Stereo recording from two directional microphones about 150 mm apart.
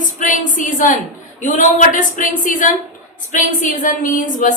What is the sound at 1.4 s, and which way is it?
A woman's voice, 55° left (ahead or behind).